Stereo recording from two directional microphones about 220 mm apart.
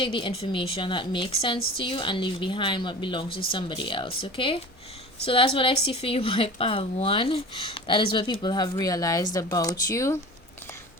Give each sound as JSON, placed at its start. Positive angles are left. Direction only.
{"t": 0.0, "sound": "speech", "side_deg": 25}